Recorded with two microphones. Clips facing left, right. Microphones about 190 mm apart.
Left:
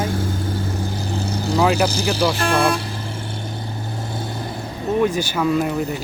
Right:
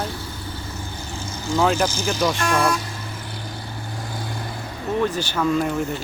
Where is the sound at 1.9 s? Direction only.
35° left (ahead or behind).